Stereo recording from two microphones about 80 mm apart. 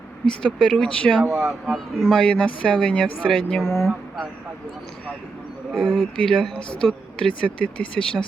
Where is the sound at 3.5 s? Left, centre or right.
Centre.